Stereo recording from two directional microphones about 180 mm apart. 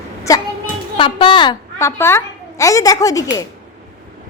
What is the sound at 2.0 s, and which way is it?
A woman's voice, 15° left (ahead or behind).